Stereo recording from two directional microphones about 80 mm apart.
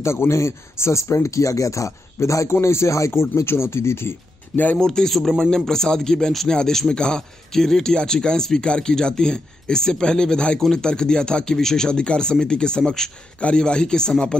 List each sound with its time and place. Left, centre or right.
0.0 s speech: left
4.7 s a man's voice: centre